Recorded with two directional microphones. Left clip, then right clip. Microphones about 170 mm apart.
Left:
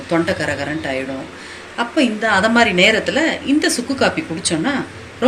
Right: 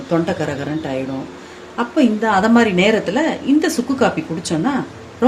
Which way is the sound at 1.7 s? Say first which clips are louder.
Right 1 dB; 65° right (ahead or behind).